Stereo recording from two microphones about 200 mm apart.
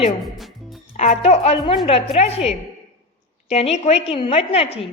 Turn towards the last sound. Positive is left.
turn(degrees=30)  # may be behind; listen again after turning